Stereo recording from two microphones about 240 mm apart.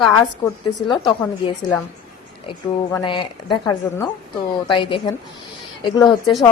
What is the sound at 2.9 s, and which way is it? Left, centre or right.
A woman's voice, centre.